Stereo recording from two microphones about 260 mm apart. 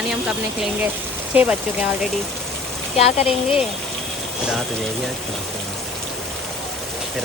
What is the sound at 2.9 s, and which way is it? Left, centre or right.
Speech, left.